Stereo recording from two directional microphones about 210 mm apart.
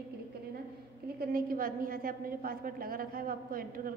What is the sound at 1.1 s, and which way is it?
A woman's voice, 45° right (ahead or behind).